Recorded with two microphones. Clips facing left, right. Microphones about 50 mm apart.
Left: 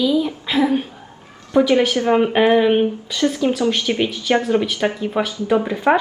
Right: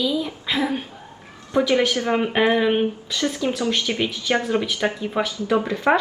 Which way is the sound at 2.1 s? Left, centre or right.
Centre.